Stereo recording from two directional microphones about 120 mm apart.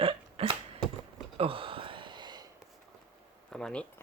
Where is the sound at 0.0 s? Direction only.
50° right (ahead or behind).